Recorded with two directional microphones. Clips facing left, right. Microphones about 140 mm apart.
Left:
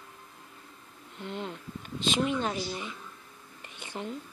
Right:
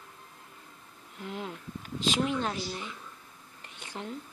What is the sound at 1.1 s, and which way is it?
A woman's voice, 5° right (ahead or behind).